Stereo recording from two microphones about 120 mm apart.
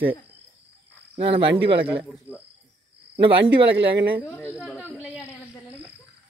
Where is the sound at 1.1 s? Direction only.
50° right (ahead or behind).